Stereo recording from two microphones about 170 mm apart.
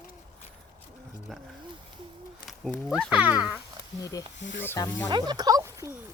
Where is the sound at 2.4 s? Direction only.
Centre (ahead or behind).